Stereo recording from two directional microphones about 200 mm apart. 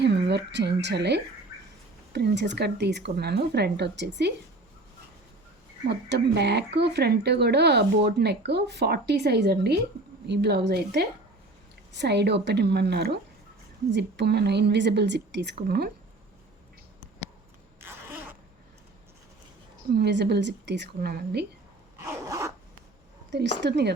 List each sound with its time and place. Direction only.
0.0 s speech: 55° right (ahead or behind)
5.9 s speech: 55° right (ahead or behind)
19.9 s speech: 55° right (ahead or behind)
21.9 s zipper: 15° right (ahead or behind)
23.3 s speech: 60° right (ahead or behind)